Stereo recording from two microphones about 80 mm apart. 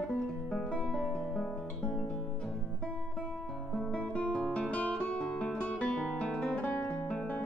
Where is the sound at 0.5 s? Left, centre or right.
Centre.